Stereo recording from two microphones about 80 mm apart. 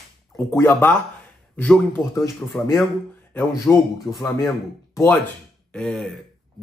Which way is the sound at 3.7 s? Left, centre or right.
Centre.